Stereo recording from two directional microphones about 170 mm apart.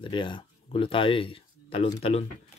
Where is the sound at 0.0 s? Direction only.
30° left (ahead or behind).